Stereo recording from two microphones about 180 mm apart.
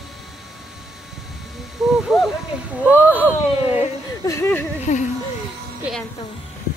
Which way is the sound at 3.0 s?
10° right (ahead or behind).